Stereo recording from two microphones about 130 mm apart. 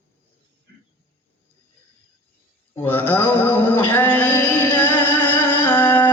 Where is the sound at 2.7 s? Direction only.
15° left (ahead or behind).